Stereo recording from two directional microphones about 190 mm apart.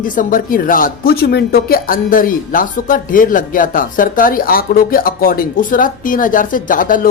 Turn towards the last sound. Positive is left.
turn(degrees=45)  # may be behind; listen again after turning